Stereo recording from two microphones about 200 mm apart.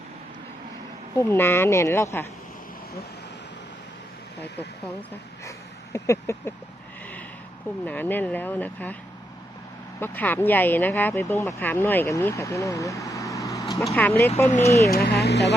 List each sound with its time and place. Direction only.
1.1 s speech: 10° left (ahead or behind)
5.5 s a sound: 15° left (ahead or behind)
7.9 s speech: 10° left (ahead or behind)
10.0 s speech: 10° left (ahead or behind)
13.8 s speech: 5° left (ahead or behind)
14.4 s speech: 35° left (ahead or behind)
14.9 s speech: 50° left (ahead or behind)